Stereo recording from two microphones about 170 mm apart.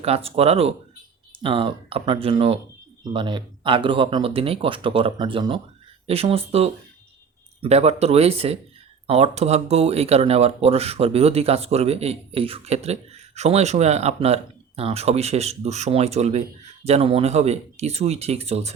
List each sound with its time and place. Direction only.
0.0 s speech: 35° right (ahead or behind)